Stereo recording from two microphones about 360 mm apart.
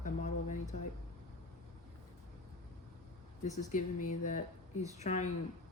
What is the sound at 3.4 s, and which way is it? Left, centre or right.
Speech, centre.